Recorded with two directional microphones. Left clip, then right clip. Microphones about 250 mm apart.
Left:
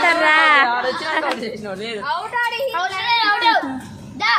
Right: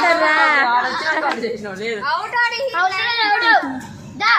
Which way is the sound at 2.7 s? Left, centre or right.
Left.